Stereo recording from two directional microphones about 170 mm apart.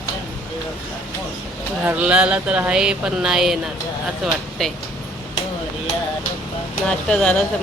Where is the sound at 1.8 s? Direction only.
10° right (ahead or behind).